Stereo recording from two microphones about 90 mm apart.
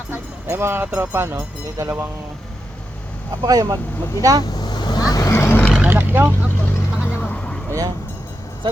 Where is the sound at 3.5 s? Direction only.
40° right (ahead or behind).